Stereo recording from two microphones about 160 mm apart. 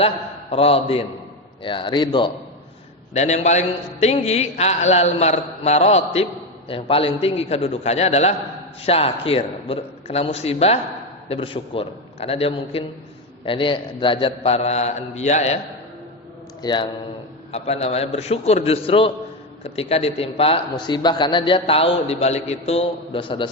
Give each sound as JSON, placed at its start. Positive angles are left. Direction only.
{"t": 0.5, "sound": "a man's voice", "side_deg": 35}
{"t": 3.2, "sound": "a man's voice", "side_deg": 45}
{"t": 16.6, "sound": "a man's voice", "side_deg": 25}
{"t": 17.5, "sound": "a man's voice", "side_deg": 40}